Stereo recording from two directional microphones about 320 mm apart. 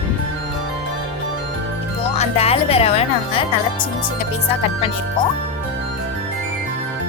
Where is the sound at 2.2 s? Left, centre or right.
Centre.